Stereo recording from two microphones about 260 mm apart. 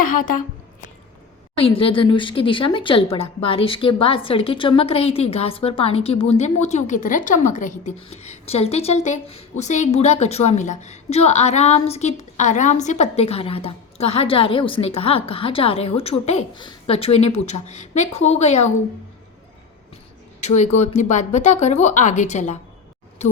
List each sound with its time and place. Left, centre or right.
1.5 s speech: left
20.4 s speech: left